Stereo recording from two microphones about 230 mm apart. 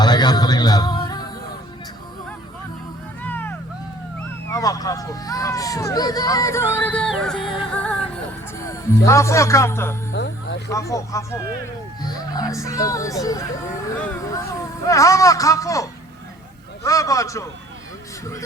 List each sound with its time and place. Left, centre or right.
0.0 s music: centre
3.2 s vehicle: centre
4.4 s speech: centre
7.5 s music: centre
9.0 s speech: centre
10.1 s music: left
10.7 s speech: centre